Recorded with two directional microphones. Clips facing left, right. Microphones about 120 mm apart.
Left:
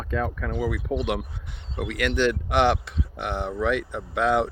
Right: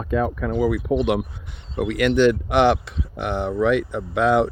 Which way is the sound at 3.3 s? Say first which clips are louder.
Right 5 dB; 75° right (ahead or behind).